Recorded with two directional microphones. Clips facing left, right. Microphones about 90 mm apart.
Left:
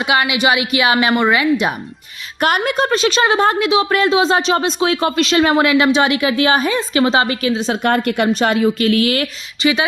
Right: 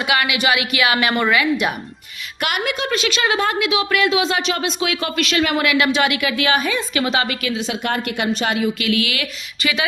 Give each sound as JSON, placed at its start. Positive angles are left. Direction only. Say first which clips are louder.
{"t": 0.0, "sound": "a woman's voice", "louder": "left 3 dB", "side_deg": 25}
{"t": 2.4, "sound": "a woman's voice", "louder": "left 6 dB", "side_deg": 40}
{"t": 9.6, "sound": "speech", "louder": "left 6 dB", "side_deg": 25}